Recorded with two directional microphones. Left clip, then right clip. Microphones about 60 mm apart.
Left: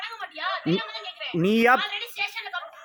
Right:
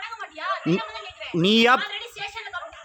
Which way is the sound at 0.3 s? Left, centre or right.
Right.